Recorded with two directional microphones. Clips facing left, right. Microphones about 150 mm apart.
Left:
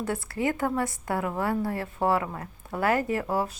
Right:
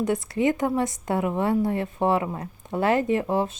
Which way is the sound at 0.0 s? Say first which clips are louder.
Right 5 dB; 20° right (ahead or behind).